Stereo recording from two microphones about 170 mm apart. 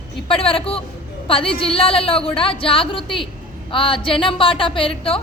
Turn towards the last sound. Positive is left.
turn(degrees=35)  # may be behind; listen again after turning